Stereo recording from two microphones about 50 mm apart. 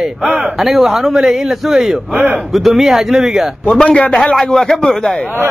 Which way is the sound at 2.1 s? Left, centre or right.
Centre.